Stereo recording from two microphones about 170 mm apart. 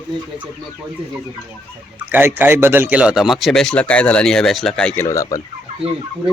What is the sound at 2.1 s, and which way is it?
Speech, 10° right (ahead or behind).